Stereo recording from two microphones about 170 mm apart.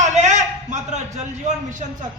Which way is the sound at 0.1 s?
45° right (ahead or behind).